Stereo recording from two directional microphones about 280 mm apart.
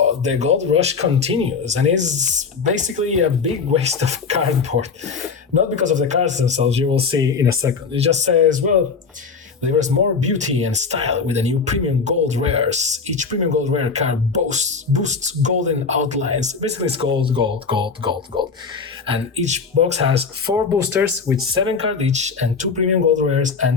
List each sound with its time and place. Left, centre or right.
0.0 s speech: right
7.9 s speech: right
9.6 s speech: right
20.6 s speech: centre; by 23.6 s right